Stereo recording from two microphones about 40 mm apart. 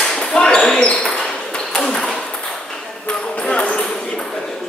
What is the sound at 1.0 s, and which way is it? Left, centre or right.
Ping, centre.